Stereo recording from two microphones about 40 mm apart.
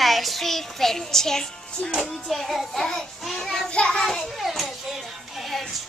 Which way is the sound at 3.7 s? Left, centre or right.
Left.